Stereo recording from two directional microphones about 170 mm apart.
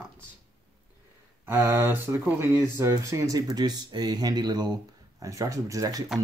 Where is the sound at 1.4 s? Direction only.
15° right (ahead or behind).